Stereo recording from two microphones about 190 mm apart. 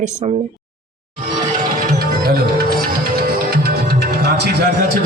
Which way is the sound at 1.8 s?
50° right (ahead or behind).